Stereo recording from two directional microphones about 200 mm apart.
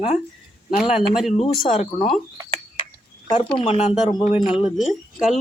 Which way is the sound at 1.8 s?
35° left (ahead or behind).